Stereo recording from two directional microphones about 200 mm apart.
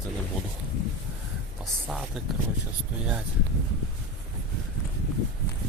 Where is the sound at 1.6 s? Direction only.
Centre (ahead or behind).